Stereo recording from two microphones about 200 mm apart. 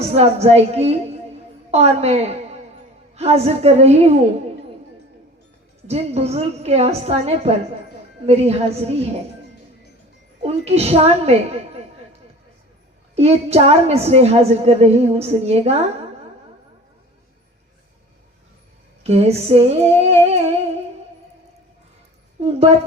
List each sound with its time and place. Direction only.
0.1 s a woman's voice: 30° right (ahead or behind)
5.9 s a woman's voice: 30° right (ahead or behind)
10.4 s a woman's voice: 30° right (ahead or behind)
13.1 s a woman's voice: 30° right (ahead or behind)
19.0 s a woman's voice: 30° right (ahead or behind)